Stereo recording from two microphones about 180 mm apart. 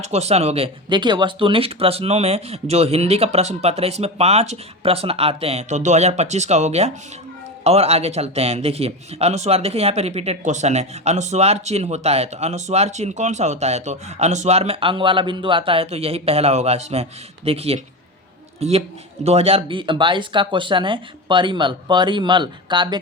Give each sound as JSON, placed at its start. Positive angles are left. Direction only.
{"t": 0.0, "sound": "a man's voice", "side_deg": -35}